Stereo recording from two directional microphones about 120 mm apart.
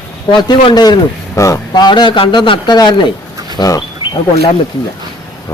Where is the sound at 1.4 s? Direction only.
25° left (ahead or behind).